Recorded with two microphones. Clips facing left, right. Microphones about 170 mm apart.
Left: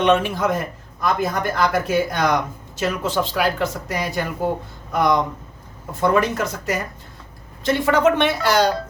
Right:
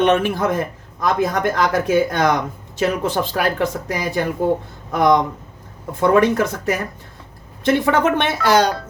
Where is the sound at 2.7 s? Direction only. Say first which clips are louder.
Right 3 dB; 55° right (ahead or behind).